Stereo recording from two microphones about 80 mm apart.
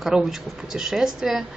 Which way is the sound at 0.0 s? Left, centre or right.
Centre.